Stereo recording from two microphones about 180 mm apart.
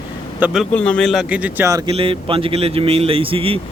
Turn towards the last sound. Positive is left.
turn(degrees=-30)  # may be behind; listen again after turning